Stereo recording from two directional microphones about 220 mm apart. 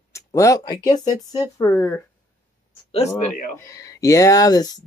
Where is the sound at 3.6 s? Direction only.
15° left (ahead or behind).